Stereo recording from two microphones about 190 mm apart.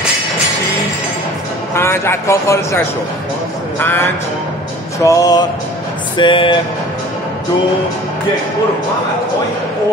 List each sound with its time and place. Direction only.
1.8 s a man's voice: 15° left (ahead or behind)
3.8 s a man's voice: 10° left (ahead or behind)
5.0 s music: 20° left (ahead or behind)